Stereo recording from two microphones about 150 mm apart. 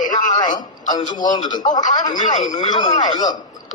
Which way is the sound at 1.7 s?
55° left (ahead or behind).